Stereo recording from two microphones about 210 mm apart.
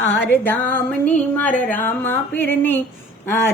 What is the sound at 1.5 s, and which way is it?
Speech, 40° left (ahead or behind).